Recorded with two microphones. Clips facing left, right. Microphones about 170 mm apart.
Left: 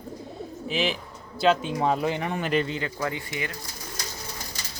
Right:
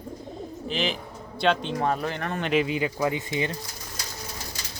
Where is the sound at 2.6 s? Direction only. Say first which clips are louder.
Right 4 dB; 15° right (ahead or behind).